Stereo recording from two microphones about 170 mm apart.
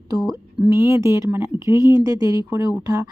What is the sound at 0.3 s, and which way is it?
A woman's voice, 20° right (ahead or behind).